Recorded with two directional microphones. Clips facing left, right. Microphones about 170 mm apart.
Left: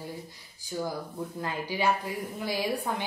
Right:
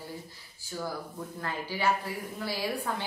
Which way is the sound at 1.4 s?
15° left (ahead or behind).